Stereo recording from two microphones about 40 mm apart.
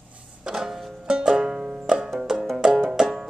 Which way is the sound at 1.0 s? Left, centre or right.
Centre.